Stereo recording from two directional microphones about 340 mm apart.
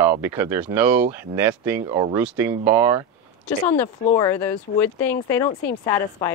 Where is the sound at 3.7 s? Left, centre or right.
Centre.